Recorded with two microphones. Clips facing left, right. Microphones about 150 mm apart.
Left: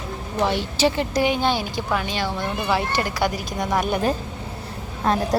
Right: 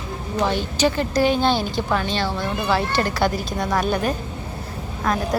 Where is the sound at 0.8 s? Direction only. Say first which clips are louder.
Right 1 dB; 25° left (ahead or behind).